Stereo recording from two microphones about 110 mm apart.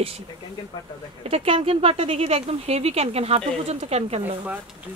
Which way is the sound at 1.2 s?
65° right (ahead or behind).